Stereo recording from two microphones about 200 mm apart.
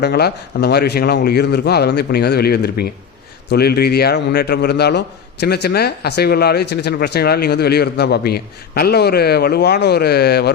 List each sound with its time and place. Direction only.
0.0 s a man's voice: 55° left (ahead or behind)